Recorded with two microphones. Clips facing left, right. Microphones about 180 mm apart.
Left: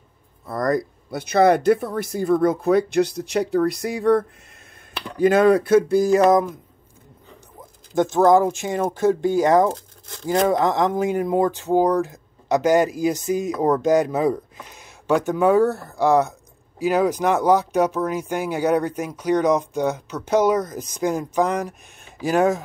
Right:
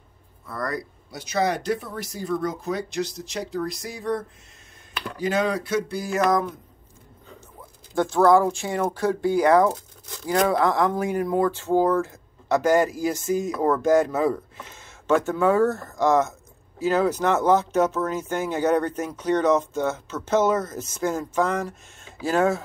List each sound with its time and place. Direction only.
0.5 s speech: 45° left (ahead or behind); by 4.2 s 60° left (ahead or behind)
5.2 s speech: 55° left (ahead or behind)
6.1 s speech: 25° left (ahead or behind)
7.9 s speech: 20° left (ahead or behind)